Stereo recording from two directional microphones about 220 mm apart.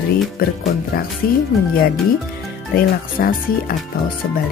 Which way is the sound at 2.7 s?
40° left (ahead or behind).